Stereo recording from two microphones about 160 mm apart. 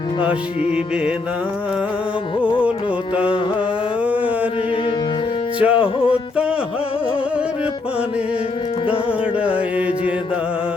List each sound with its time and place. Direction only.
0.2 s music: 35° left (ahead or behind)
5.5 s music: 5° right (ahead or behind)